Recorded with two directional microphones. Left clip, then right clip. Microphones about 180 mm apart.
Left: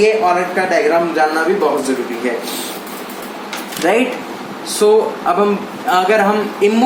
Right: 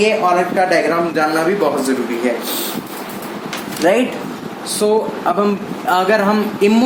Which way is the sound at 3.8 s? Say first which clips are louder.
Even; 40° right (ahead or behind).